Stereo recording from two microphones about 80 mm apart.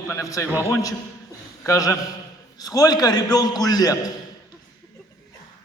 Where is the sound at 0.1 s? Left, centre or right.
Left.